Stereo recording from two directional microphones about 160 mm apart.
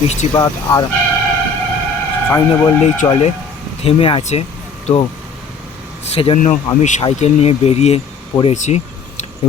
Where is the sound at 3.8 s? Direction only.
35° left (ahead or behind).